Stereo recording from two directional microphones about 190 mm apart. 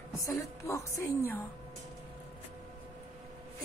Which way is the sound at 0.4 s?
15° left (ahead or behind).